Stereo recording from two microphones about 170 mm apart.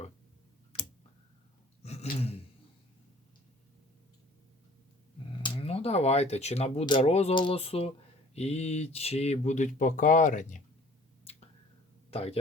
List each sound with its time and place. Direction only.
1.8 s gasp: 40° left (ahead or behind)
5.4 s speech: 35° left (ahead or behind)
11.3 s finger snapping: 35° left (ahead or behind)
12.1 s speech: 35° left (ahead or behind)